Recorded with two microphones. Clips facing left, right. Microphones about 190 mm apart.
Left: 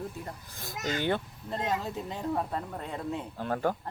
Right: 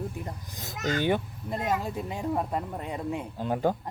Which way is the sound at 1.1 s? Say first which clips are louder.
Right 3 dB; 10° right (ahead or behind).